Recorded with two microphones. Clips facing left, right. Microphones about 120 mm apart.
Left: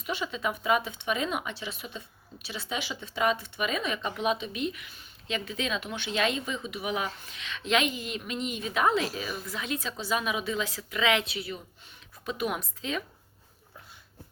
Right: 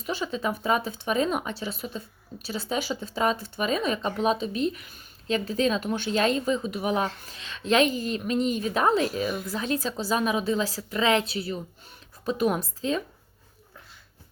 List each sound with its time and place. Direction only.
0.0 s speech: 35° right (ahead or behind)